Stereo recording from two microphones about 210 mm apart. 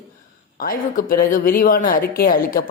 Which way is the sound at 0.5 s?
45° left (ahead or behind).